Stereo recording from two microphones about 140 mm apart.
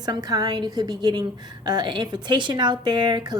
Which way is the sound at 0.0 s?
25° right (ahead or behind).